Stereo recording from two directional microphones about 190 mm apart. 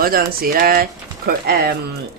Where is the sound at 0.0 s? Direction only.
50° right (ahead or behind).